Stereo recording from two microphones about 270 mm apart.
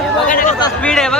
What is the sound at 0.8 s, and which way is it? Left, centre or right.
Speech, centre.